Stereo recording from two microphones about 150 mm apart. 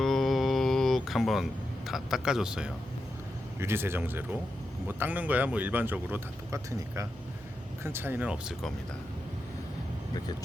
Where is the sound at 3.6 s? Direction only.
15° right (ahead or behind).